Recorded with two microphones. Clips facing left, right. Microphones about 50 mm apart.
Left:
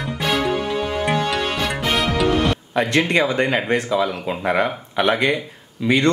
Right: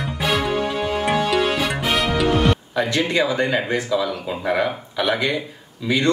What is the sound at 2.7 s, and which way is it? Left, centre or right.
Speech, left.